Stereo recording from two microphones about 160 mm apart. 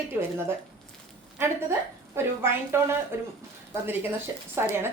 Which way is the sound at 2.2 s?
15° right (ahead or behind).